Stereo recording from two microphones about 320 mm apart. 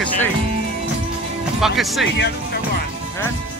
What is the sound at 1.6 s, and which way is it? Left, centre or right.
Speech, centre.